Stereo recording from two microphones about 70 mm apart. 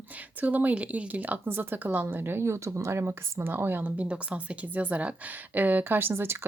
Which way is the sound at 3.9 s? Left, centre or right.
Centre.